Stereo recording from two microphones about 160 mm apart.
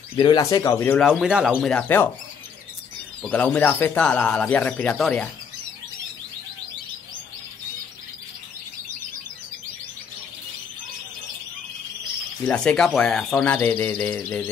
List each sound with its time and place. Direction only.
0.2 s speech: 25° left (ahead or behind)
0.9 s speech: centre (ahead or behind)
3.2 s speech: 5° left (ahead or behind)
12.4 s speech: 5° left (ahead or behind)